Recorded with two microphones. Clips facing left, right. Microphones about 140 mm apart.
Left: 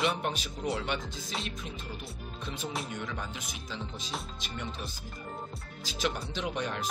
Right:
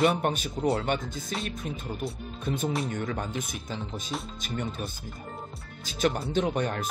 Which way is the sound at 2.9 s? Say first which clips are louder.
Right 7 dB; 50° right (ahead or behind).